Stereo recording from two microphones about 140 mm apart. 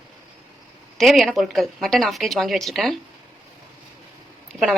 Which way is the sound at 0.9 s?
Centre (ahead or behind).